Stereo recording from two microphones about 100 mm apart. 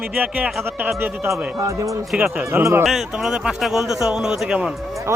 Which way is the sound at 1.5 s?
30° right (ahead or behind).